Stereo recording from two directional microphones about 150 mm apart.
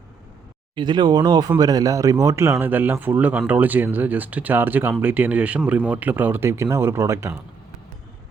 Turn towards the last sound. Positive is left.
turn(degrees=-20)  # may be behind; listen again after turning